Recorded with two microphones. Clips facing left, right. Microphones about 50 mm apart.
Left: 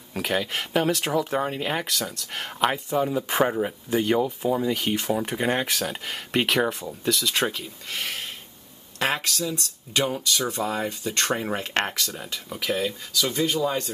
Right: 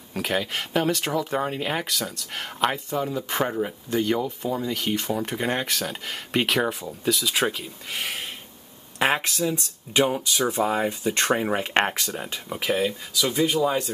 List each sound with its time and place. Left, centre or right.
0.1 s speech: centre
9.0 s speech: right